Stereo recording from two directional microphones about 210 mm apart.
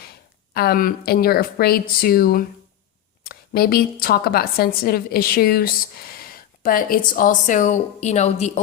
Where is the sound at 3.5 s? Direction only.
45° left (ahead or behind).